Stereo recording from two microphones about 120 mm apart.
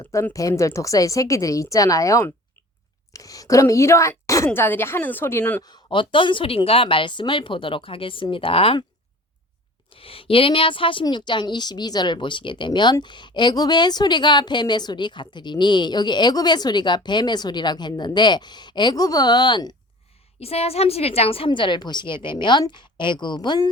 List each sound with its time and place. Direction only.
0.3 s a woman's voice: 25° left (ahead or behind)
5.6 s speech: 40° left (ahead or behind)
9.9 s speech: 50° left (ahead or behind)
20.4 s speech: 55° left (ahead or behind); by 23.6 s 40° left (ahead or behind)